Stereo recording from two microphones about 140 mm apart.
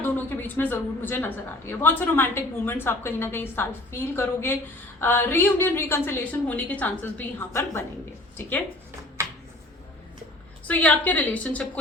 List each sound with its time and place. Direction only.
0.0 s a woman's voice: 15° left (ahead or behind)
10.7 s a woman's voice: 10° left (ahead or behind)